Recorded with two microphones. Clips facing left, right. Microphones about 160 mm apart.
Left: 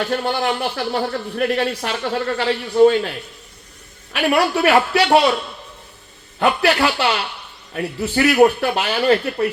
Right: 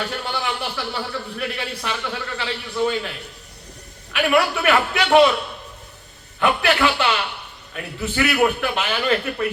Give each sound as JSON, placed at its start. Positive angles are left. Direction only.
{"t": 0.3, "sound": "a man's voice", "side_deg": 50}
{"t": 4.1, "sound": "a man's voice", "side_deg": 35}
{"t": 6.4, "sound": "a man's voice", "side_deg": 35}